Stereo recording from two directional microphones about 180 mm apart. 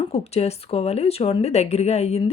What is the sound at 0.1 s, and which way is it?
Speech, 35° left (ahead or behind).